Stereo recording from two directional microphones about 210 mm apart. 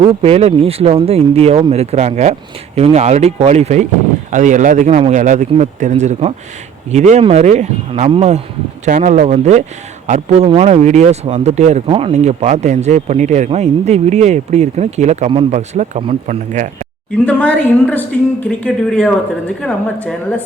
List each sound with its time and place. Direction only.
0.0 s speech: 30° right (ahead or behind)
17.2 s a woman's voice: 5° left (ahead or behind)